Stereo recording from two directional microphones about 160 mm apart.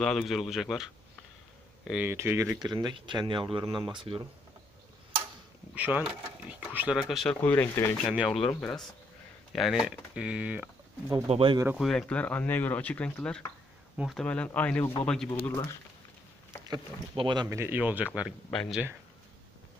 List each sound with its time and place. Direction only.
0.0 s speech: centre (ahead or behind)
1.9 s speech: 5° right (ahead or behind); by 4.2 s 30° right (ahead or behind)
5.8 s speech: 10° right (ahead or behind)
7.0 s speech: centre (ahead or behind)
8.1 s speech: 5° right (ahead or behind)
11.2 s speech: 35° right (ahead or behind)
11.7 s speech: centre (ahead or behind)
13.9 s speech: centre (ahead or behind)
16.6 s speech: 30° right (ahead or behind)
17.6 s speech: 10° right (ahead or behind)
18.5 s speech: 5° left (ahead or behind)